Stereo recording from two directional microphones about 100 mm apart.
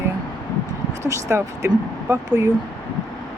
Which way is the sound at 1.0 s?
30° right (ahead or behind).